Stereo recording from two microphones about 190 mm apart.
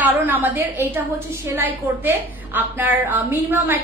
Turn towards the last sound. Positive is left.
turn(degrees=-10)  # may be behind; listen again after turning